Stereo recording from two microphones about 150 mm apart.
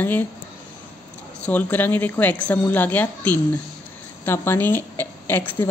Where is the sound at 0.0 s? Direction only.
10° left (ahead or behind).